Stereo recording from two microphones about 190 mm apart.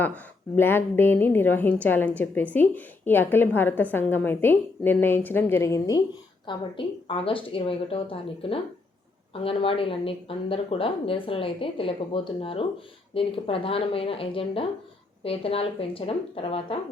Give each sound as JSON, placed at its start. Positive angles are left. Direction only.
{"t": 0.5, "sound": "a woman's voice", "side_deg": 10}